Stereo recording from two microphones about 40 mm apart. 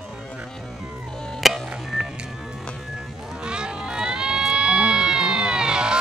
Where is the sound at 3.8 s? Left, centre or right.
Centre.